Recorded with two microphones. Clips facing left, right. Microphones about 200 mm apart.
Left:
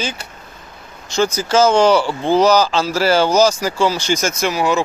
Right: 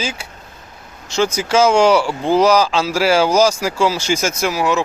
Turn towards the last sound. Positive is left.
turn(degrees=0)  # may be behind; listen again after turning